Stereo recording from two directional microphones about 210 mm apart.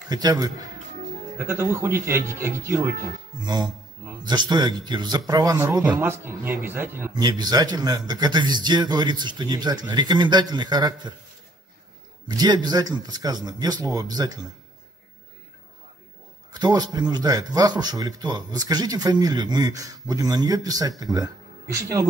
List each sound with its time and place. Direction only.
0.1 s a man's voice: 20° right (ahead or behind)
12.3 s speech: 20° right (ahead or behind)
16.5 s speech: 20° right (ahead or behind)